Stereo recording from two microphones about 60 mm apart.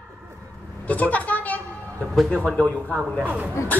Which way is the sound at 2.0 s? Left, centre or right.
Centre.